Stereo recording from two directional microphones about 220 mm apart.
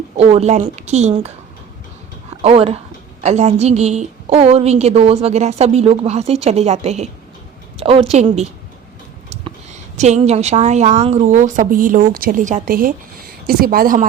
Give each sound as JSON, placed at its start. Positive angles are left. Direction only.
{"t": 0.2, "sound": "a woman's voice", "side_deg": -30}
{"t": 2.4, "sound": "a woman's voice", "side_deg": -25}
{"t": 9.3, "sound": "a sound", "side_deg": -30}
{"t": 10.0, "sound": "a woman's voice", "side_deg": -30}